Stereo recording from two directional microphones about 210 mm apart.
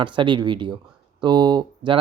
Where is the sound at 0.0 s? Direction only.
20° right (ahead or behind).